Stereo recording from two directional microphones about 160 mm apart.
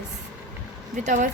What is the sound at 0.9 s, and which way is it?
Speech, 50° right (ahead or behind).